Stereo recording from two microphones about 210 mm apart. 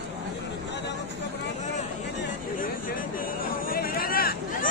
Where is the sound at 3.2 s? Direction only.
45° left (ahead or behind).